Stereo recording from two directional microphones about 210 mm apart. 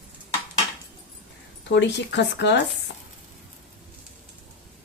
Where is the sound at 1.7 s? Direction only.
55° left (ahead or behind).